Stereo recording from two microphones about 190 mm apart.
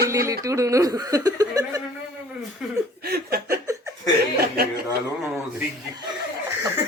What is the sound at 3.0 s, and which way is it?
Chuckle, 55° right (ahead or behind).